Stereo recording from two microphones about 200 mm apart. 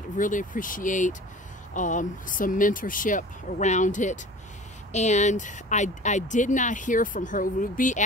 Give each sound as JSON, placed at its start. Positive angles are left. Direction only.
{"t": 0.2, "sound": "speech", "side_deg": 40}